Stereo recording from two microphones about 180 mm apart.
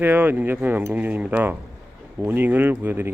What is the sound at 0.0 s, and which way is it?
Speech, 10° right (ahead or behind).